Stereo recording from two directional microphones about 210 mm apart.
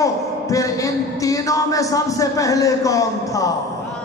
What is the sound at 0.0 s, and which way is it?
A man's voice, 15° left (ahead or behind).